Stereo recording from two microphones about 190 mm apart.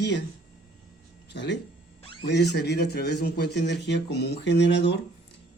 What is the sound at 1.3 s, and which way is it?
A man's voice, 65° left (ahead or behind).